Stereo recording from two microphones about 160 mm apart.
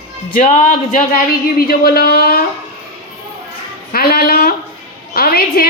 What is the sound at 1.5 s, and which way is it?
Speech, 70° left (ahead or behind).